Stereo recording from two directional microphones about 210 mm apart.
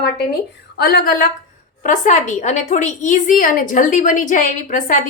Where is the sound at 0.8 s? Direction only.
45° left (ahead or behind).